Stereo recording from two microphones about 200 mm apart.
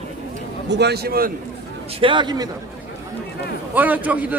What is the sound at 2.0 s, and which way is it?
Speech, 25° right (ahead or behind).